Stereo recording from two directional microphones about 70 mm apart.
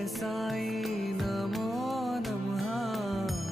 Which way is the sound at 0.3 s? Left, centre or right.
Centre.